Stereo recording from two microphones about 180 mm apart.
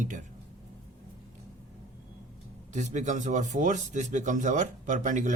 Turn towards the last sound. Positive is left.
turn(degrees=-45)  # may be behind; listen again after turning